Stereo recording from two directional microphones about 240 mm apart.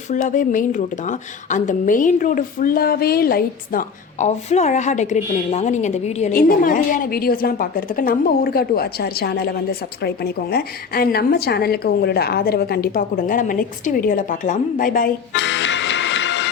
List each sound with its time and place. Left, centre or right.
0.1 s a woman's voice: left
15.3 s music: left